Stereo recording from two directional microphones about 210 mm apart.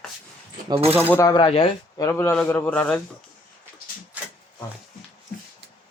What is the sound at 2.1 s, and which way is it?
Speech, 10° left (ahead or behind).